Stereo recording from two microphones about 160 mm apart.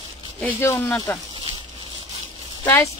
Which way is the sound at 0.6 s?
15° left (ahead or behind).